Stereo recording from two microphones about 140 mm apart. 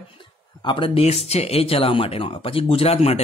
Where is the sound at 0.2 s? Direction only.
35° left (ahead or behind).